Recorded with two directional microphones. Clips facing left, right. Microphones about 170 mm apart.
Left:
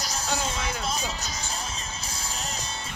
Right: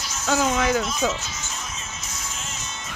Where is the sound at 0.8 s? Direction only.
35° left (ahead or behind).